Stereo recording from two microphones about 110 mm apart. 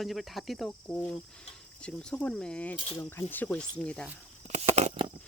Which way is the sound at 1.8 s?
10° left (ahead or behind).